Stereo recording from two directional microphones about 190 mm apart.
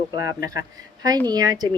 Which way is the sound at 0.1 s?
20° right (ahead or behind).